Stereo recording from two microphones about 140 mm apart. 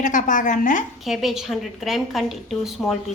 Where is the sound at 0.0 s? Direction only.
65° left (ahead or behind).